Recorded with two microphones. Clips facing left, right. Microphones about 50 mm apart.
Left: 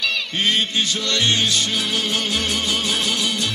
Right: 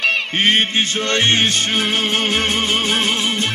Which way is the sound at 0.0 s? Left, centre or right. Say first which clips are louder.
Right 5 dB; right.